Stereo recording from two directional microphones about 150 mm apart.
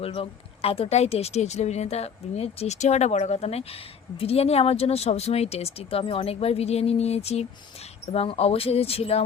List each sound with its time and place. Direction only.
0.0 s speech: 40° left (ahead or behind)